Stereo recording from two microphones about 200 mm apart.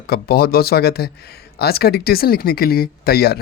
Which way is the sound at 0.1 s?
50° left (ahead or behind).